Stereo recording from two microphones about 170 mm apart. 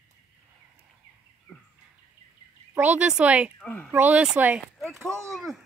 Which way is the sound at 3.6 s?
10° left (ahead or behind).